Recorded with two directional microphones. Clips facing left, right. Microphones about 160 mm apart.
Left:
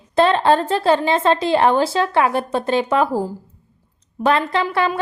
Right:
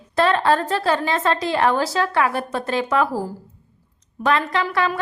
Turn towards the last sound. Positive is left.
turn(degrees=30)  # may be behind; listen again after turning